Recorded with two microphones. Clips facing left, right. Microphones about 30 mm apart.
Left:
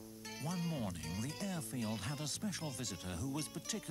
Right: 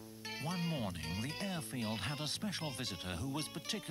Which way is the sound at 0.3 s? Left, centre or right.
Right.